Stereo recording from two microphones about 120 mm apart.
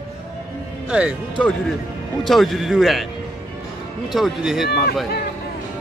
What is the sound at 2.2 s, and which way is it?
Speech, centre (ahead or behind).